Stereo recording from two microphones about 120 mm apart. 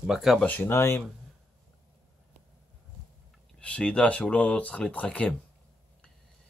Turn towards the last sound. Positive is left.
turn(degrees=10)  # may be behind; listen again after turning